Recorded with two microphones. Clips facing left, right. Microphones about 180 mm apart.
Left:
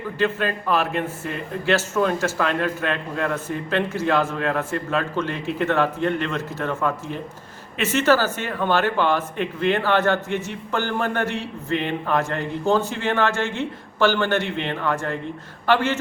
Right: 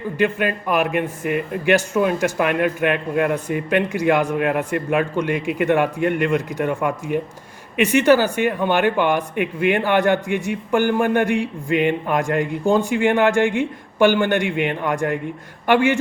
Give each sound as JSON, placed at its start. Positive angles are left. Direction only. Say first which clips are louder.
{"t": 0.2, "sound": "a man's voice", "louder": "right 3 dB", "side_deg": -15}